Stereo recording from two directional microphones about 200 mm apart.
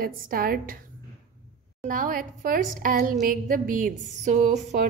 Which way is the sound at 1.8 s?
45° right (ahead or behind).